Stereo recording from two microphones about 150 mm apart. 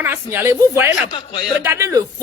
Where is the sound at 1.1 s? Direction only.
35° left (ahead or behind).